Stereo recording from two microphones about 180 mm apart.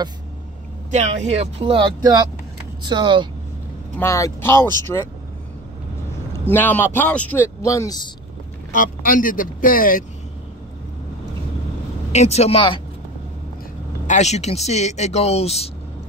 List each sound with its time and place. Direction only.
0.9 s speech: 30° right (ahead or behind)
4.0 s a man's voice: 15° left (ahead or behind)
6.5 s a man's voice: 10° left (ahead or behind)
8.7 s speech: 50° left (ahead or behind)
12.1 s speech: 35° left (ahead or behind)
14.0 s speech: 40° left (ahead or behind)